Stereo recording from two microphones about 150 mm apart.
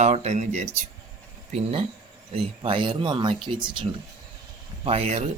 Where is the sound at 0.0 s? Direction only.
45° right (ahead or behind).